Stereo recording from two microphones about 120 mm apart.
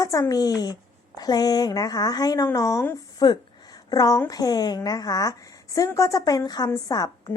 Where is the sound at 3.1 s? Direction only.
35° left (ahead or behind).